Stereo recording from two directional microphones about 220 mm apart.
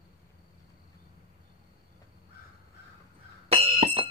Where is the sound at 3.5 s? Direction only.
25° right (ahead or behind).